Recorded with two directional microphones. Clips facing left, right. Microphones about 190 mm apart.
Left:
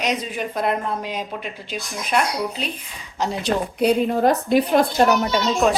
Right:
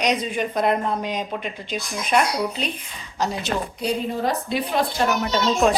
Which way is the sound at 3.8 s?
65° left (ahead or behind).